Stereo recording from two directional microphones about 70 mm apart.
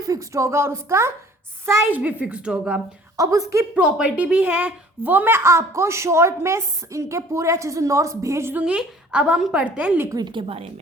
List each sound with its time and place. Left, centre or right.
0.0 s a woman's voice: right
1.9 s a woman's voice: right
3.2 s a woman's voice: right
3.8 s speech: centre; by 8.5 s right
8.5 s a woman's voice: centre
10.1 s speech: right